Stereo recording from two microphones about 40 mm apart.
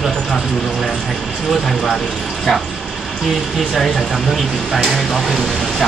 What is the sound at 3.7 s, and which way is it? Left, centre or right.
Speech, centre.